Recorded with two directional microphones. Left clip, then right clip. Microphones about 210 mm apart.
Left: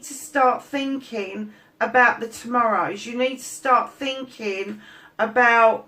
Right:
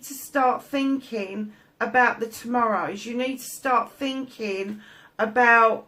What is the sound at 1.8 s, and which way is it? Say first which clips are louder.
A woman's voice: left 3 dB; 40° right (ahead or behind).